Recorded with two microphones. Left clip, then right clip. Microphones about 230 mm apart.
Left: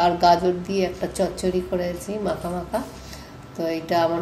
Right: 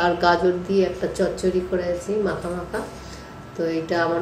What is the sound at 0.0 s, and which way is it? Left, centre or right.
A woman's voice, left.